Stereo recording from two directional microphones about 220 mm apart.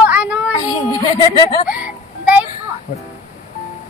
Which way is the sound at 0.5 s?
20° left (ahead or behind).